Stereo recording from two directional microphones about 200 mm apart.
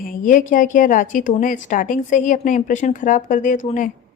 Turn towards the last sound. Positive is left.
turn(degrees=40)  # may be behind; listen again after turning